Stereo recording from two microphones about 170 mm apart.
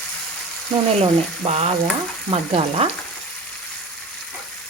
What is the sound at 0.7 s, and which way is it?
A woman's voice, 40° right (ahead or behind).